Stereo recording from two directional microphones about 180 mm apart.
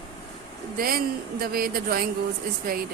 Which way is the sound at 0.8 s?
55° right (ahead or behind).